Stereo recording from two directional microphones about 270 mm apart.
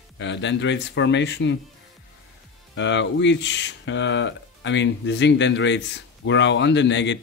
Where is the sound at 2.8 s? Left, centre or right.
Left.